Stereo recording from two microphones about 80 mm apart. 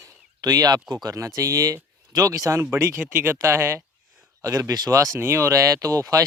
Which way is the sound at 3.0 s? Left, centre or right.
Right.